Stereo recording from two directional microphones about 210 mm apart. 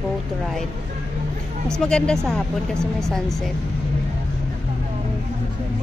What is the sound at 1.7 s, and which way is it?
A woman's voice, 5° left (ahead or behind).